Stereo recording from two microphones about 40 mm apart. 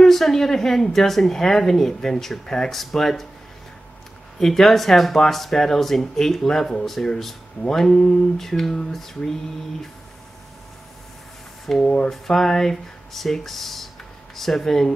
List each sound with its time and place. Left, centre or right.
0.0 s a woman's voice: centre
4.4 s a woman's voice: centre
11.8 s speech: left
12.1 s speech: centre